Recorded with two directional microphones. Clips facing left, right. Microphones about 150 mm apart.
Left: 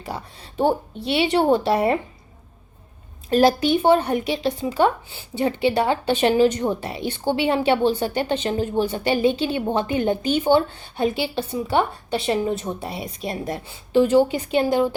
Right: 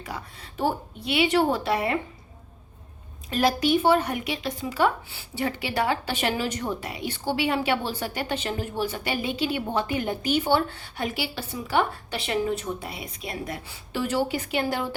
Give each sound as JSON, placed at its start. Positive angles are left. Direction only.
{"t": 0.0, "sound": "a woman's voice", "side_deg": 25}
{"t": 3.2, "sound": "a woman's voice", "side_deg": 35}